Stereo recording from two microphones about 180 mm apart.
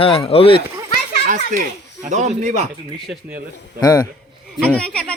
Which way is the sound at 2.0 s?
40° right (ahead or behind).